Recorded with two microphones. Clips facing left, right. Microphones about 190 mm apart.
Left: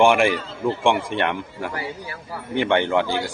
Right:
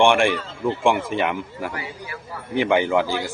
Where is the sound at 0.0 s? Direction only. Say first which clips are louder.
Left 1 dB; centre (ahead or behind).